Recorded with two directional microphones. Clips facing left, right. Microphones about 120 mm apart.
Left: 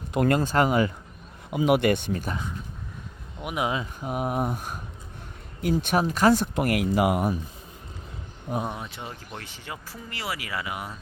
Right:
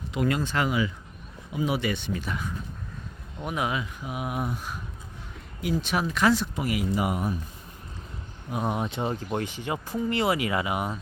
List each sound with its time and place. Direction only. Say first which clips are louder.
0.1 s speech: left 4 dB; 50° left (ahead or behind)
1.5 s speech: left 6 dB; 65° left (ahead or behind); by 2.4 s 45° left (ahead or behind)
3.4 s speech: left 1 dB; 20° left (ahead or behind)
4.0 s speech: left 4 dB; 40° left (ahead or behind); by 7.3 s 80° left
8.8 s speech: right 9 dB; 25° right (ahead or behind)
9.4 s speech: right 8 dB; 15° right (ahead or behind)